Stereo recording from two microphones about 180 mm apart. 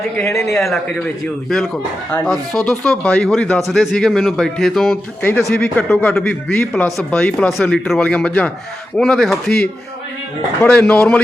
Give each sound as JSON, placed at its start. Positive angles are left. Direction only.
{"t": 0.2, "sound": "a man's voice", "side_deg": 15}
{"t": 0.7, "sound": "a man's voice", "side_deg": 0}